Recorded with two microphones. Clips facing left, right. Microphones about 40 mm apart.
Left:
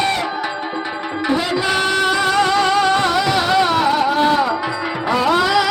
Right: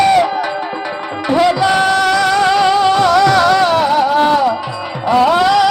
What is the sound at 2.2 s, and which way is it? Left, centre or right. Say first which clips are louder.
Music: right 3 dB; right.